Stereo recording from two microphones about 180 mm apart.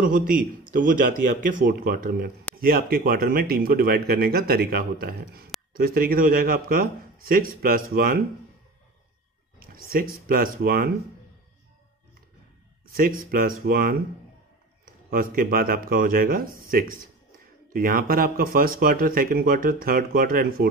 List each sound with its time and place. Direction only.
0.0 s a man's voice: 50° right (ahead or behind)
9.6 s a sound: 55° right (ahead or behind)
10.2 s a man's voice: 50° right (ahead or behind)
12.8 s a man's voice: 50° right (ahead or behind)
15.0 s a man's voice: 50° right (ahead or behind)